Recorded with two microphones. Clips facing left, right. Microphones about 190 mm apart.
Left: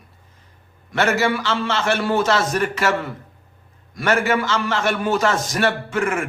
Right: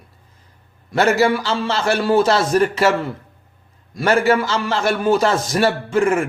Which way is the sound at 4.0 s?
35° right (ahead or behind).